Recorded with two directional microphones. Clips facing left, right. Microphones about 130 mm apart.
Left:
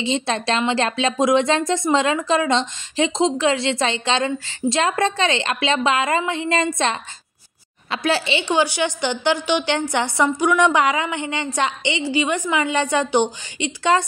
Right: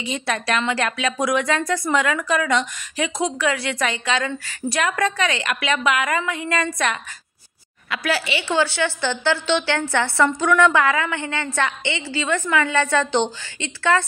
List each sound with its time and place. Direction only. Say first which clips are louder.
0.0 s a woman's voice: left 3 dB; 25° left (ahead or behind)
7.9 s a woman's voice: left 3 dB; 25° left (ahead or behind)